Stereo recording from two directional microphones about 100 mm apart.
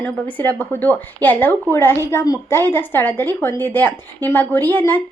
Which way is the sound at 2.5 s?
20° left (ahead or behind).